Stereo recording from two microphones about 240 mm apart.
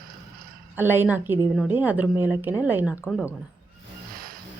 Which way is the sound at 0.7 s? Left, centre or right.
Centre.